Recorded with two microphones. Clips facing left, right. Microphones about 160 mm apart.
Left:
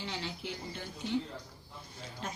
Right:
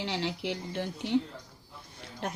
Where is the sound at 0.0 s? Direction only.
75° right (ahead or behind).